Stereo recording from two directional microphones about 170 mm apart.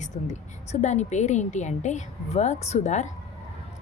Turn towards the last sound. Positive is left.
turn(degrees=45)  # may be behind; listen again after turning